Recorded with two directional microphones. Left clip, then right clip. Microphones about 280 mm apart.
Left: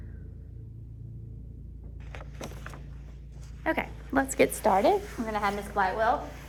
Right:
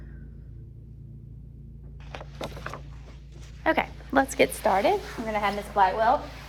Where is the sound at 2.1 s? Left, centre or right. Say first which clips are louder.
Right 5 dB; centre.